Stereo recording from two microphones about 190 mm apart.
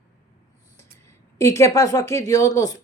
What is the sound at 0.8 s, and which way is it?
Speech, 15° left (ahead or behind).